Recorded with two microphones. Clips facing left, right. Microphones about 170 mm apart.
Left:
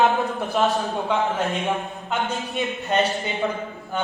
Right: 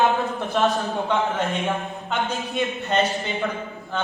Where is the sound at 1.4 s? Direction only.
Centre (ahead or behind).